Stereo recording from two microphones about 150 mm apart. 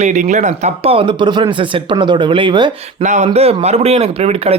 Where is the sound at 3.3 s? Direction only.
45° right (ahead or behind).